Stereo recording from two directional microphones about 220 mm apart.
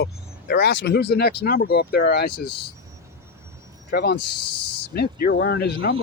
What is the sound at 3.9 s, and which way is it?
Speech, 45° left (ahead or behind).